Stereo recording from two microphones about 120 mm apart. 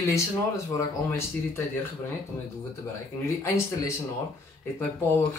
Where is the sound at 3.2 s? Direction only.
25° left (ahead or behind).